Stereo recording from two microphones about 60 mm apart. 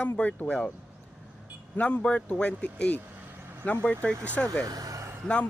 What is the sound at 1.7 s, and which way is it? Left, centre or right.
Speech, left.